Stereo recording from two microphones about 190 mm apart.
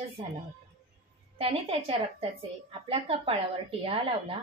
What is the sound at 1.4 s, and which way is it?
A woman's voice, 30° right (ahead or behind).